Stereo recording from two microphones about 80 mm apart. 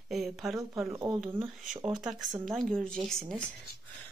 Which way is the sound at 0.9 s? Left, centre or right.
Right.